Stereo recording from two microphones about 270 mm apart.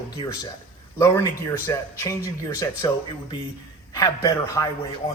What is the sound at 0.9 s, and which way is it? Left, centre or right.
A man's voice, centre.